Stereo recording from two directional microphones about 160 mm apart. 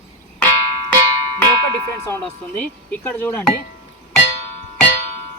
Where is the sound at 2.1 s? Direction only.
15° left (ahead or behind).